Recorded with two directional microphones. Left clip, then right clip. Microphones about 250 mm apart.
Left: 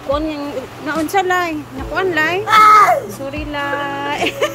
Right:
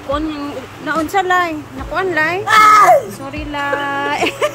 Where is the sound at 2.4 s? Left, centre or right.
Right.